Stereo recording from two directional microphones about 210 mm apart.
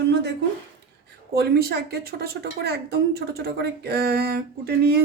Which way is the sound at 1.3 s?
50° right (ahead or behind).